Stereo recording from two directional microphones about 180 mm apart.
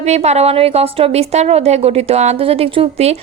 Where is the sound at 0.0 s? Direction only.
40° right (ahead or behind).